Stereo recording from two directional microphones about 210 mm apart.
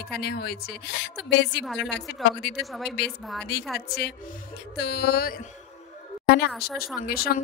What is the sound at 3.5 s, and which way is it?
Speech, 50° left (ahead or behind).